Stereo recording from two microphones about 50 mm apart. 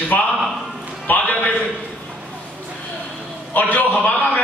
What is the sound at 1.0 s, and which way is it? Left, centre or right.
Speech, left.